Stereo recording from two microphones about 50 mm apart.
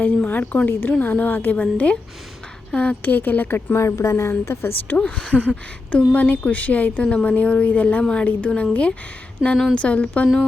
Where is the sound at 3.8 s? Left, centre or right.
Left.